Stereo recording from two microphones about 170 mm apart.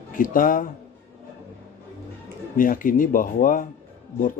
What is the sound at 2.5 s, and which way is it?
Speech, 55° left (ahead or behind).